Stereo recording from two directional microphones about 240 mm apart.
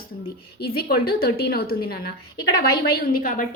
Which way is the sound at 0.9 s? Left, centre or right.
Left.